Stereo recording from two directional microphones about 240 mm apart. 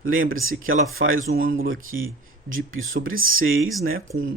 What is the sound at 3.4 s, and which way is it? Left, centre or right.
Speech, right.